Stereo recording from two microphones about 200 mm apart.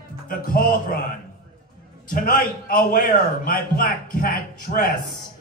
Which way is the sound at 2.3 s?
45° left (ahead or behind).